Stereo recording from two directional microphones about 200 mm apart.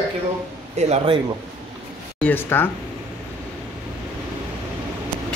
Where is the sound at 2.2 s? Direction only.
10° left (ahead or behind).